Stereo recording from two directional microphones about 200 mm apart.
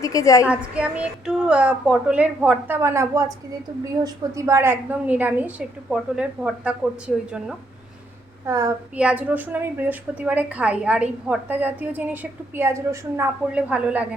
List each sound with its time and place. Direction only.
0.0 s a woman's voice: 15° left (ahead or behind)
0.4 s a woman's voice: 5° right (ahead or behind)
8.4 s a woman's voice: 15° right (ahead or behind)